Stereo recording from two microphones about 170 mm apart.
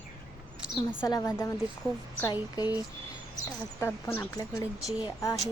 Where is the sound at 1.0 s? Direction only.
20° left (ahead or behind).